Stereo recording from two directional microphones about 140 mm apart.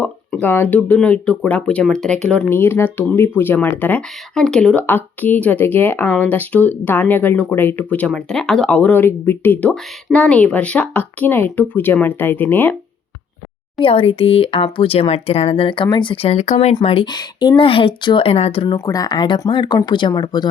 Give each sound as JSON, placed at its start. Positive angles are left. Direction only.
{"t": 0.0, "sound": "speech", "side_deg": 10}
{"t": 13.8, "sound": "speech", "side_deg": 40}
{"t": 16.7, "sound": "speech", "side_deg": 40}
{"t": 18.9, "sound": "speech", "side_deg": 25}